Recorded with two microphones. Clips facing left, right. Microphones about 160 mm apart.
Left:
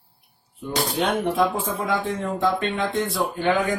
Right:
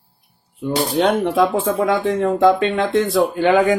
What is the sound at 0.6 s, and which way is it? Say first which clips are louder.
Speech: right 7 dB; 70° right (ahead or behind).